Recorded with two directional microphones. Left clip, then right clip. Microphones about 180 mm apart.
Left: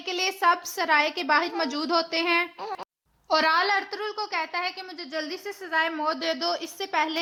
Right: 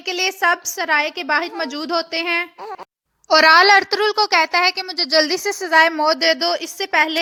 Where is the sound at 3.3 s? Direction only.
40° right (ahead or behind).